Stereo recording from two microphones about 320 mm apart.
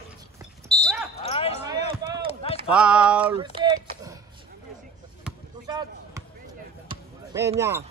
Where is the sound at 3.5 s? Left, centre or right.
Centre.